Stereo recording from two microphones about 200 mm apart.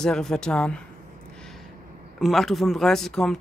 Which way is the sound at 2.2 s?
Centre (ahead or behind).